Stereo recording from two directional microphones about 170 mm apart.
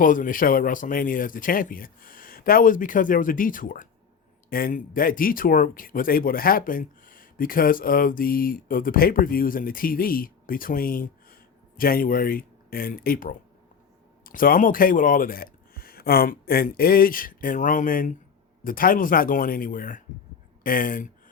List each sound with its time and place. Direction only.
0.0 s speech: 50° left (ahead or behind)